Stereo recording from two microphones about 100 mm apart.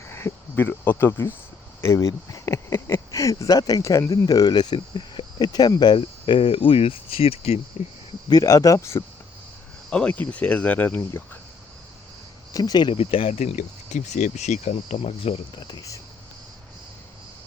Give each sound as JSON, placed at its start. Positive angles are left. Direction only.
{"t": 0.1, "sound": "speech", "side_deg": 25}
{"t": 1.9, "sound": "speech", "side_deg": 40}
{"t": 6.0, "sound": "speech", "side_deg": 60}
{"t": 8.3, "sound": "speech", "side_deg": 35}
{"t": 9.9, "sound": "speech", "side_deg": 10}
{"t": 12.5, "sound": "speech", "side_deg": 40}
{"t": 12.9, "sound": "speech", "side_deg": 70}
{"t": 14.6, "sound": "speech", "side_deg": 90}
{"t": 15.5, "sound": "speech", "side_deg": 50}